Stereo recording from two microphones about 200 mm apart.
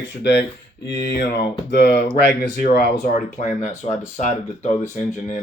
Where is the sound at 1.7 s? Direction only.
55° left (ahead or behind).